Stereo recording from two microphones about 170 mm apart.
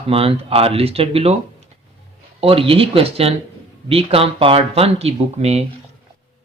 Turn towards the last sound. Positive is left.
turn(degrees=-40)  # may be behind; listen again after turning